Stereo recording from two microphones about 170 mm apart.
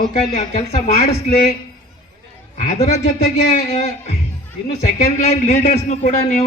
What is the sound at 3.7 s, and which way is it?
A man's voice, 40° left (ahead or behind).